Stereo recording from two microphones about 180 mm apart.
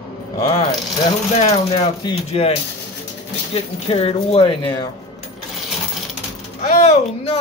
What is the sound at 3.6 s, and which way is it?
Speech, 35° left (ahead or behind).